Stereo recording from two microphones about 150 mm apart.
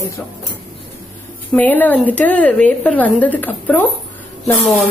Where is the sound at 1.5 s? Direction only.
10° left (ahead or behind).